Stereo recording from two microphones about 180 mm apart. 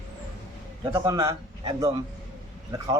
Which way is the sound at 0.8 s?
25° right (ahead or behind).